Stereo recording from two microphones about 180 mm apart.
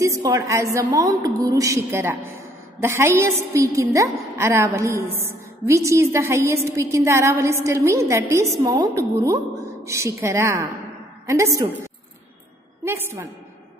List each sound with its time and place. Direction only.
0.0 s a woman's voice: 20° right (ahead or behind)